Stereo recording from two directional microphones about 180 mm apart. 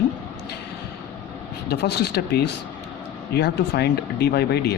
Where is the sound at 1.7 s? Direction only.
65° left (ahead or behind).